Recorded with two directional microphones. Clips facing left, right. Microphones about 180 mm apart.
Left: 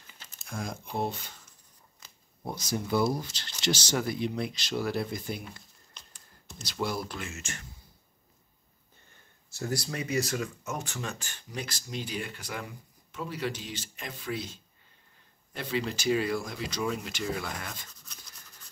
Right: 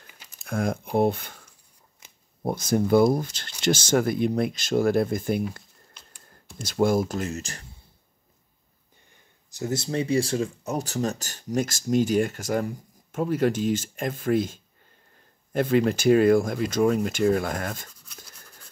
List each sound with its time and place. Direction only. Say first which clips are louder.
0.4 s speech: right 10 dB; 60° right (ahead or behind)
2.0 s a sound: right 1 dB; 20° right (ahead or behind)
2.4 s speech: right 10 dB; 50° right (ahead or behind)
6.6 s speech: right 11 dB; 50° right (ahead or behind)
9.5 s speech: right 5 dB; 20° right (ahead or behind); by 17.8 s 50° right (ahead or behind)